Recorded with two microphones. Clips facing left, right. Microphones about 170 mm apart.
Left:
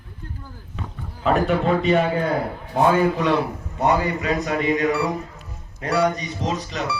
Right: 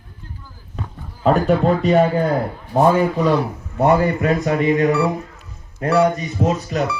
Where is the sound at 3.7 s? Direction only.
55° right (ahead or behind).